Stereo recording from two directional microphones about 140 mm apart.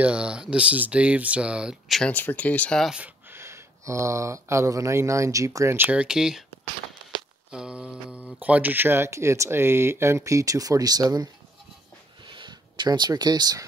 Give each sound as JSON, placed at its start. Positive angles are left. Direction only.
{"t": 0.0, "sound": "speech", "side_deg": -5}
{"t": 2.9, "sound": "speech", "side_deg": -10}
{"t": 7.5, "sound": "a sound", "side_deg": -5}
{"t": 8.4, "sound": "speech", "side_deg": -10}
{"t": 12.3, "sound": "speech", "side_deg": -35}